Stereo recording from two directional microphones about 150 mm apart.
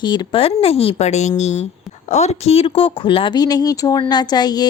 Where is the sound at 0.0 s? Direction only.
35° left (ahead or behind).